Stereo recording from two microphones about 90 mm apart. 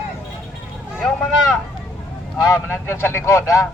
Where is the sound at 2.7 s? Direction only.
25° left (ahead or behind).